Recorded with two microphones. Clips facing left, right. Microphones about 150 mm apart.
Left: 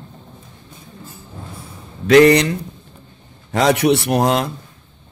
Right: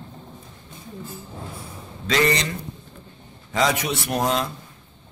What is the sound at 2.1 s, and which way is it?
A man's voice, 60° left (ahead or behind).